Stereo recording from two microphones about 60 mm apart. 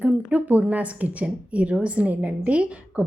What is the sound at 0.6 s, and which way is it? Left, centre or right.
A woman's voice, right.